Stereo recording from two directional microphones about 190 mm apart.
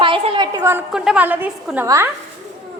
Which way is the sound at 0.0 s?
25° right (ahead or behind).